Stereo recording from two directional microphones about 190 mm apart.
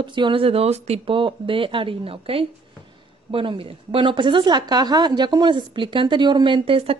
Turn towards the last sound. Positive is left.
turn(degrees=-30)  # may be behind; listen again after turning